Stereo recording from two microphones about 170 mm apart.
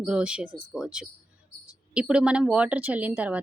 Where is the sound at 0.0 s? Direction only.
5° right (ahead or behind).